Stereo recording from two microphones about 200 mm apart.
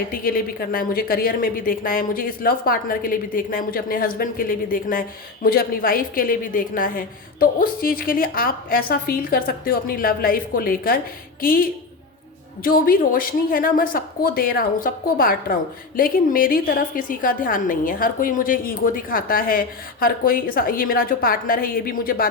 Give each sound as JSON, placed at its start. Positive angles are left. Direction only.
{"t": 0.1, "sound": "a woman's voice", "side_deg": 45}